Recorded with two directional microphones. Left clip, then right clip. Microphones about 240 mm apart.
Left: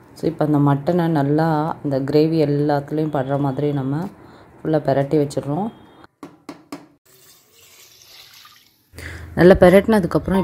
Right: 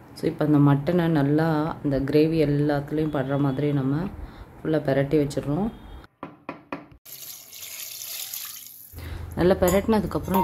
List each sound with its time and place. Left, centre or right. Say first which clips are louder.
0.2 s speech: left 3 dB; centre
8.9 s speech: left 8 dB; left